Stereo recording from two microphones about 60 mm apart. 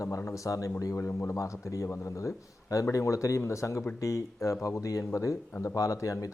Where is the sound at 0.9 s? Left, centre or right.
Left.